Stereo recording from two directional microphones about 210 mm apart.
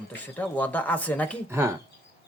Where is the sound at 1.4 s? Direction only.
10° right (ahead or behind).